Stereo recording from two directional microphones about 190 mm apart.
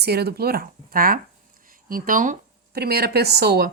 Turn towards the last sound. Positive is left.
turn(degrees=-55)  # may be behind; listen again after turning